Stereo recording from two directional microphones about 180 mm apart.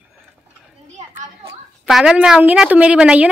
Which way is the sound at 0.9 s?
40° right (ahead or behind).